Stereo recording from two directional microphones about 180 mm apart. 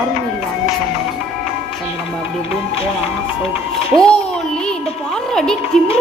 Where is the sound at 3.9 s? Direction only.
5° left (ahead or behind).